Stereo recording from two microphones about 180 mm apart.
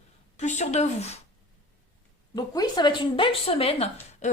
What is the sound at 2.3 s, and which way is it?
A woman's voice, 25° left (ahead or behind).